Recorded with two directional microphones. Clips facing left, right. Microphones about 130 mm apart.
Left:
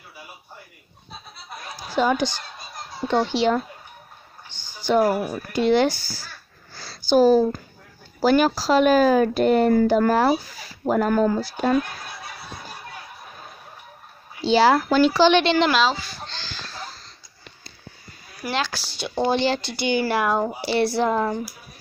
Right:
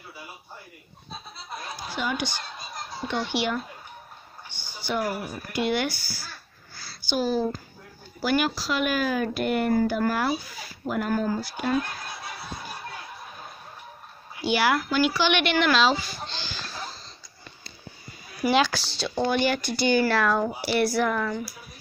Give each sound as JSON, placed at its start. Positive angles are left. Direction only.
{"t": 1.8, "sound": "a sound", "side_deg": 40}
{"t": 3.1, "sound": "speech", "side_deg": 35}
{"t": 4.5, "sound": "a sound", "side_deg": 90}
{"t": 5.0, "sound": "speech", "side_deg": 60}
{"t": 5.6, "sound": "speech", "side_deg": 35}
{"t": 7.1, "sound": "speech", "side_deg": 40}
{"t": 11.1, "sound": "speech", "side_deg": 60}
{"t": 11.4, "sound": "speech", "side_deg": 40}
{"t": 14.4, "sound": "speech", "side_deg": 30}
{"t": 15.7, "sound": "speech", "side_deg": 0}
{"t": 16.3, "sound": "a sound", "side_deg": -15}
{"t": 18.4, "sound": "speech", "side_deg": 0}
{"t": 19.1, "sound": "speech", "side_deg": 25}